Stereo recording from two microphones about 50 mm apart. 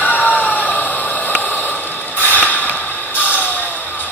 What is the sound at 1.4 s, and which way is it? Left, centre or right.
Snort, left.